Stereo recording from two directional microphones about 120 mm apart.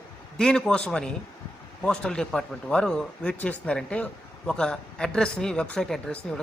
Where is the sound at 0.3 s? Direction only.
5° left (ahead or behind).